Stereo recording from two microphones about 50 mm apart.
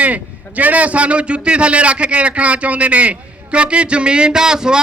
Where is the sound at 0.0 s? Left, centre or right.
Right.